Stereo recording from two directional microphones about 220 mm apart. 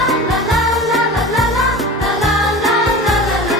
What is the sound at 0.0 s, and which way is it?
Music, centre (ahead or behind).